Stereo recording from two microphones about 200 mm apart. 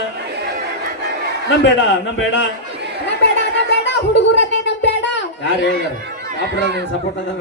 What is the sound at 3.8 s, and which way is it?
Music, 65° left (ahead or behind).